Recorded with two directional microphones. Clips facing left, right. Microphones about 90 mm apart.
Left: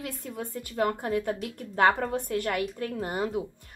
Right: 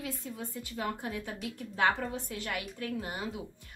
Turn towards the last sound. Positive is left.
turn(degrees=45)  # may be behind; listen again after turning